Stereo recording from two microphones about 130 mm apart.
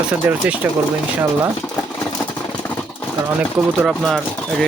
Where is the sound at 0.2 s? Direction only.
10° right (ahead or behind).